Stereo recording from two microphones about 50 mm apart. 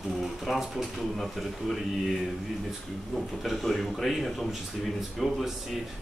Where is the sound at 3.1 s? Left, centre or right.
Centre.